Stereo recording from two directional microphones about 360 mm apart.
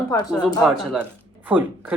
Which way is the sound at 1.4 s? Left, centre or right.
Centre.